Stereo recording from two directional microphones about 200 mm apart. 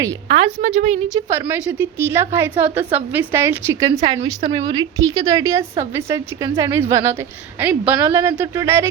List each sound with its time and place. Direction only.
0.3 s a woman's voice: 30° right (ahead or behind)
1.1 s a woman's voice: 15° right (ahead or behind); by 4.7 s 30° right (ahead or behind)
4.7 s a woman's voice: 20° right (ahead or behind)